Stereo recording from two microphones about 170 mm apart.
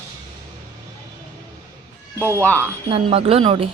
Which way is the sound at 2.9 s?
35° right (ahead or behind).